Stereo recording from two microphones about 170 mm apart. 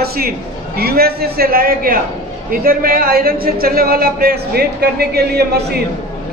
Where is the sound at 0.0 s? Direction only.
65° right (ahead or behind).